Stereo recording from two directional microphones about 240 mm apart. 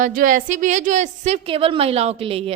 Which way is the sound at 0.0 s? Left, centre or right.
Right.